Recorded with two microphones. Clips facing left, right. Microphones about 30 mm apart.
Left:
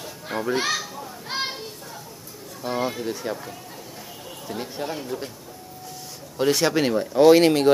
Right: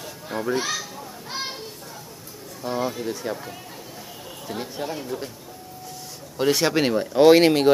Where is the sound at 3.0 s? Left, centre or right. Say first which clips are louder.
Even; centre.